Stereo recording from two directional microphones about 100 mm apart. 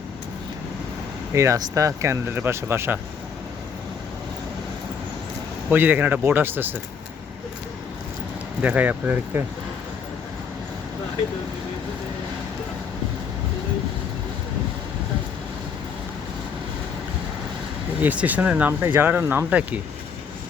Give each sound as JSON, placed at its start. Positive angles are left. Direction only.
{"t": 1.3, "sound": "speech", "side_deg": -30}
{"t": 5.7, "sound": "speech", "side_deg": -20}
{"t": 8.6, "sound": "speech", "side_deg": -15}
{"t": 18.0, "sound": "speech", "side_deg": -15}